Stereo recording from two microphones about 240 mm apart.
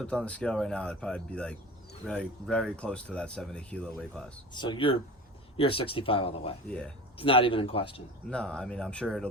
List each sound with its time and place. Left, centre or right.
0.0 s speech: centre
4.5 s speech: centre
6.7 s speech: centre
7.2 s speech: left
8.3 s speech: centre